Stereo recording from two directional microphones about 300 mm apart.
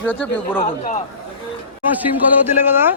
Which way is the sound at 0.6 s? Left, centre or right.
Left.